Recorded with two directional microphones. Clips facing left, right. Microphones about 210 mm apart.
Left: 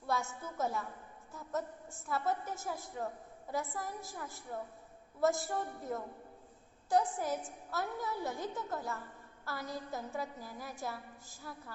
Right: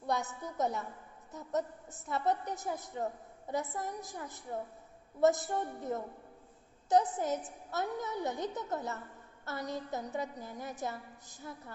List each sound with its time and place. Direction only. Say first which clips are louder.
0.0 s a woman's voice: right 2 dB; 20° right (ahead or behind)